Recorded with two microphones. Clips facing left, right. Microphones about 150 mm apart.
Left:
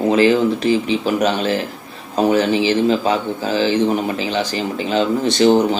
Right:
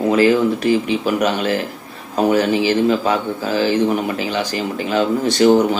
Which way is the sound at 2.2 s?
25° left (ahead or behind).